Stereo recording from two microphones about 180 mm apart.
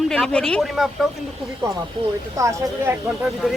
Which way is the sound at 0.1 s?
5° left (ahead or behind).